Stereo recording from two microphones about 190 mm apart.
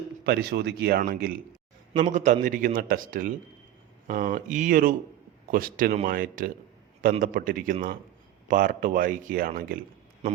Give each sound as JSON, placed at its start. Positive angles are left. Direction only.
{"t": 0.3, "sound": "a man's voice", "side_deg": -60}